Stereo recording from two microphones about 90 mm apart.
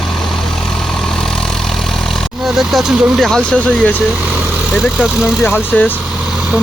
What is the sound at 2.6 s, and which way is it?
Speech, centre (ahead or behind).